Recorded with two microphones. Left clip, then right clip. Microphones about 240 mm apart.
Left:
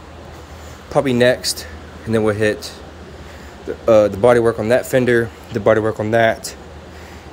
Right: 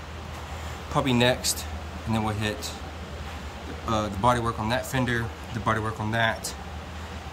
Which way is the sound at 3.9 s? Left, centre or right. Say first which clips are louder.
Left 13 dB; centre.